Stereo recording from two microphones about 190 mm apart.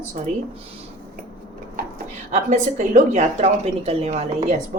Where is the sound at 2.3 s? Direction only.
40° right (ahead or behind).